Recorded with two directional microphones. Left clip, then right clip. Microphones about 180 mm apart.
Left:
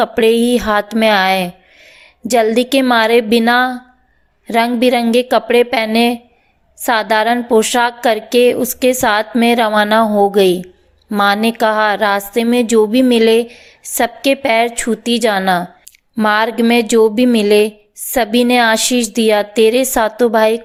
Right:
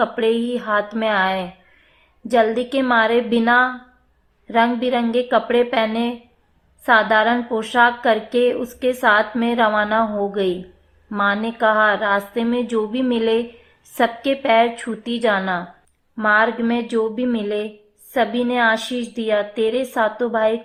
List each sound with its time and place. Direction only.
0.0 s a woman's voice: 25° left (ahead or behind)